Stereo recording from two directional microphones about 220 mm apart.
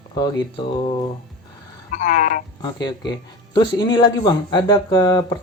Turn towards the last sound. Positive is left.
turn(degrees=20)  # may be behind; listen again after turning